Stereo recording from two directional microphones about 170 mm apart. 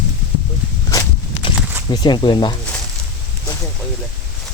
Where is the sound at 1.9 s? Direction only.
25° left (ahead or behind).